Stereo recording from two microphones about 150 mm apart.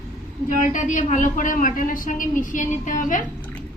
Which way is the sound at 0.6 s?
55° left (ahead or behind).